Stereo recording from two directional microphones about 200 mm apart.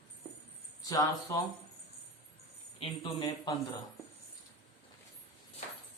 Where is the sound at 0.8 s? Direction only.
15° left (ahead or behind).